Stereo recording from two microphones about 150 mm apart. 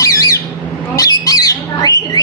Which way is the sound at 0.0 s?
25° left (ahead or behind).